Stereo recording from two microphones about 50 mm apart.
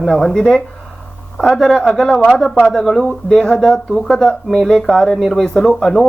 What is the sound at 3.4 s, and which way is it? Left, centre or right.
Speech, centre.